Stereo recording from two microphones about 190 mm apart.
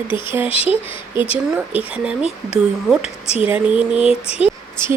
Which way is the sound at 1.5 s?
5° right (ahead or behind).